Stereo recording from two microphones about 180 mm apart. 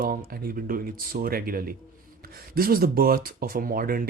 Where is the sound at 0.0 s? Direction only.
55° right (ahead or behind).